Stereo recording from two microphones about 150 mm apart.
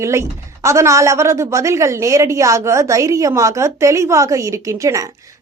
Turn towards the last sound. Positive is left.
turn(degrees=-20)  # may be behind; listen again after turning